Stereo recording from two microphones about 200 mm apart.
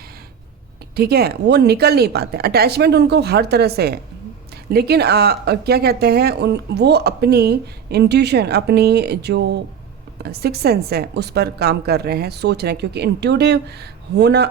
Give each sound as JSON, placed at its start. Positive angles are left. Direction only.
{"t": 0.9, "sound": "a woman's voice", "side_deg": -50}